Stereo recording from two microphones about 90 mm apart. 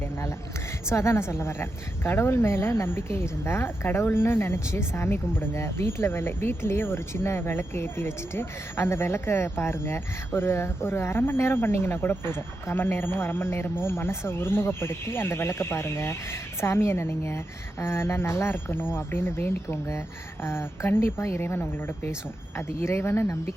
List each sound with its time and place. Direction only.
0.9 s speech: 30° left (ahead or behind)